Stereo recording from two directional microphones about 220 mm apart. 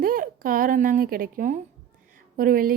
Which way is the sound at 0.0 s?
40° right (ahead or behind).